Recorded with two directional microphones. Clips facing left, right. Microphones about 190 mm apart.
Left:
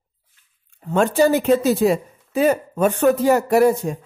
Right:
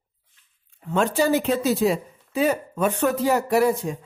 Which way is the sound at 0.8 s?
45° left (ahead or behind).